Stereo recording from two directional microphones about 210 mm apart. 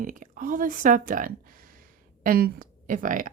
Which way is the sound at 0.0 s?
40° right (ahead or behind).